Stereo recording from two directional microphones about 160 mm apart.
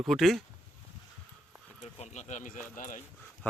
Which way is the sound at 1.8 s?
45° left (ahead or behind).